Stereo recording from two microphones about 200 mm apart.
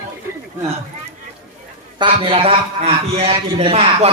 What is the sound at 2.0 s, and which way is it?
A man's voice, 25° right (ahead or behind).